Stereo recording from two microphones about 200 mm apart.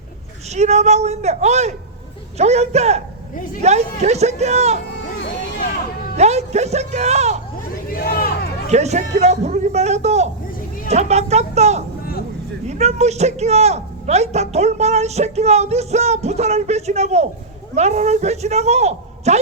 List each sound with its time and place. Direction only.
0.5 s a man's voice: 35° right (ahead or behind)
6.1 s a man's voice: 35° right (ahead or behind)
7.9 s a sound: 45° left (ahead or behind)
8.7 s a man's voice: 35° right (ahead or behind)